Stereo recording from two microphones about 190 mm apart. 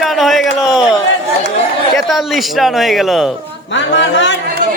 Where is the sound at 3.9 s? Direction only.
70° left (ahead or behind).